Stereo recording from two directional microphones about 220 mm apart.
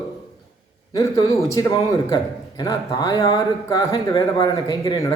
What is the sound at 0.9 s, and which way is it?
A man's voice, 15° left (ahead or behind).